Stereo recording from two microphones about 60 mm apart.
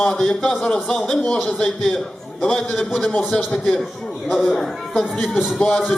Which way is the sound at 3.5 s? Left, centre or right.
Centre.